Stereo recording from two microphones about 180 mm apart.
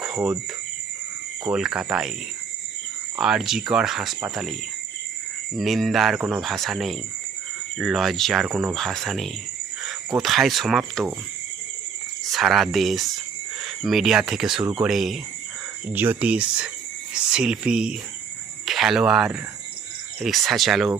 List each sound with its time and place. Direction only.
0.0 s cricket: 5° right (ahead or behind)
1.5 s speech: 5° right (ahead or behind)
3.2 s speech: 5° right (ahead or behind)
5.5 s speech: centre (ahead or behind)
12.3 s speech: centre (ahead or behind)